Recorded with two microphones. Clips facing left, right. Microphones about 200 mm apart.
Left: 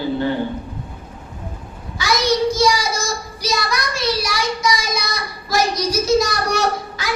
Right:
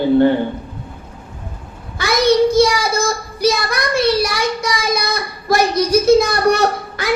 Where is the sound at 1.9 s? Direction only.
55° right (ahead or behind).